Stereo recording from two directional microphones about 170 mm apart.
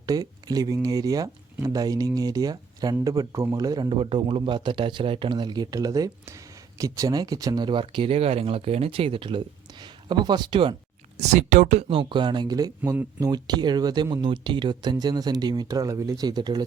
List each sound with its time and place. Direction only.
0.0 s a man's voice: 20° right (ahead or behind)
11.3 s a man's voice: 45° right (ahead or behind); by 16.6 s 25° right (ahead or behind)